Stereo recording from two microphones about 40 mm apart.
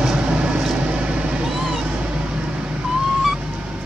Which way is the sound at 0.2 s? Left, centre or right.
Right.